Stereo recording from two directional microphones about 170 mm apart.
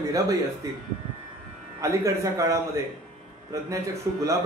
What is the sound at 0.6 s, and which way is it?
Speech, 20° right (ahead or behind).